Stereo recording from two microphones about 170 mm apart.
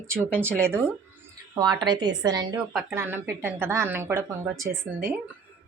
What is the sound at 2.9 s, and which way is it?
A woman's voice, 15° right (ahead or behind).